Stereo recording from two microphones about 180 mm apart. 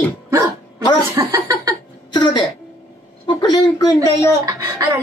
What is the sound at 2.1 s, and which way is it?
A man's voice, 25° left (ahead or behind).